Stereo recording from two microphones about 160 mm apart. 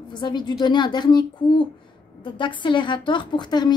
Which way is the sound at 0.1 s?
25° left (ahead or behind).